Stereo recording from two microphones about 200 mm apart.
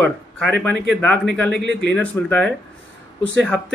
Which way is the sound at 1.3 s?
60° right (ahead or behind).